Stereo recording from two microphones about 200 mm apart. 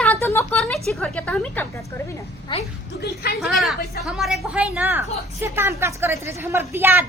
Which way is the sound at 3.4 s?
Centre (ahead or behind).